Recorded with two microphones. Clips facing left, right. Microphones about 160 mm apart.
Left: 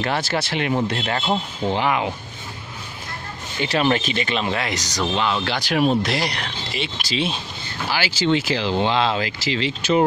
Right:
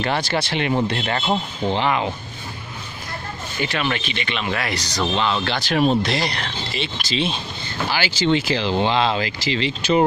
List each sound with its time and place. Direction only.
0.0 s speech: centre (ahead or behind)
3.6 s speech: 35° left (ahead or behind)
4.5 s speech: 20° left (ahead or behind)
5.0 s speech: 10° left (ahead or behind)